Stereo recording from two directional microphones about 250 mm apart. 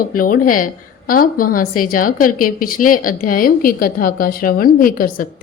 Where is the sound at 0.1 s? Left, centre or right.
Left.